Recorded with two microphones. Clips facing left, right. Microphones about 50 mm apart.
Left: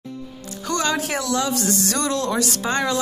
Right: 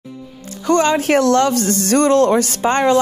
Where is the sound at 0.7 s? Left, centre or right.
Right.